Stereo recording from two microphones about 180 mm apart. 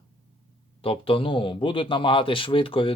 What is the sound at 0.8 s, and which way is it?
A man's voice, 30° left (ahead or behind).